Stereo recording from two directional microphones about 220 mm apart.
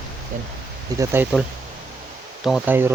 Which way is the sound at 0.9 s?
15° right (ahead or behind).